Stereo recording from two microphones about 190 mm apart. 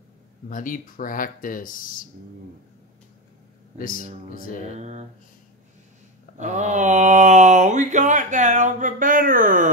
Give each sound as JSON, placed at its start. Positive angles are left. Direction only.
{"t": 0.5, "sound": "speech", "side_deg": 45}
{"t": 3.7, "sound": "speech", "side_deg": 50}
{"t": 4.7, "sound": "mantra", "side_deg": -35}
{"t": 6.3, "sound": "mantra", "side_deg": -40}